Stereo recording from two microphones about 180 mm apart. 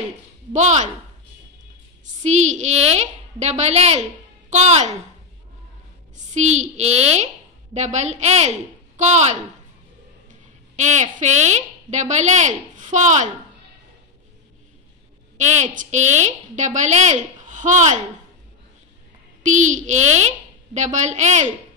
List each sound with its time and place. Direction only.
0.5 s a woman's voice: 40° right (ahead or behind)
2.2 s a woman's voice: 40° right (ahead or behind)
6.1 s a woman's voice: 40° right (ahead or behind)
10.8 s a woman's voice: 40° right (ahead or behind)
15.4 s a woman's voice: 40° right (ahead or behind)
19.4 s a woman's voice: 45° right (ahead or behind)